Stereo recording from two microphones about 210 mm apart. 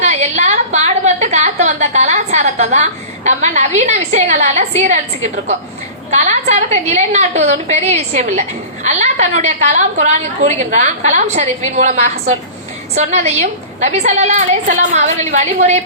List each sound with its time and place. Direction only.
0.0 s a woman's voice: 35° right (ahead or behind)
6.1 s a woman's voice: 35° right (ahead or behind)